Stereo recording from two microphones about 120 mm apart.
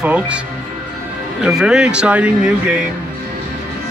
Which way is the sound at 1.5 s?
5° right (ahead or behind).